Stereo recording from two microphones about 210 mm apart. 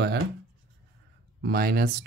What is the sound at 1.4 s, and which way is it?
Speech, 45° right (ahead or behind).